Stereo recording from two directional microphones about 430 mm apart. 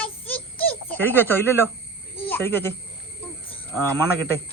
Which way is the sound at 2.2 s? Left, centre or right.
Centre.